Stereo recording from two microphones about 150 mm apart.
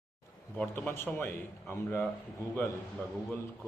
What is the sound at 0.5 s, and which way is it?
Speech, 10° left (ahead or behind).